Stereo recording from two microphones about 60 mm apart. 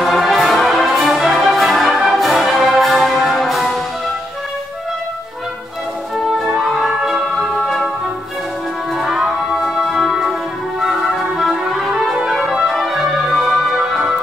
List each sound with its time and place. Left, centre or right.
0.0 s brass instrument: centre
2.8 s music: centre
6.3 s music: centre
7.3 s music: centre
8.9 s music: centre